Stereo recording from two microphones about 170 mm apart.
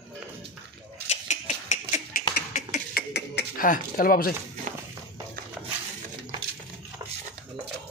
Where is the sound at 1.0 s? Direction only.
40° left (ahead or behind); by 3.6 s 80° left.